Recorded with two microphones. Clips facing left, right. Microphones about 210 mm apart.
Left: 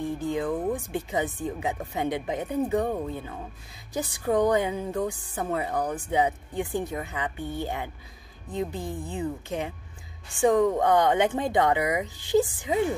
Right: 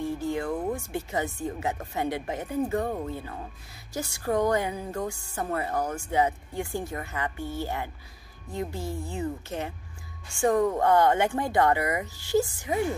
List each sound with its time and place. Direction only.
0.0 s speech: 15° left (ahead or behind)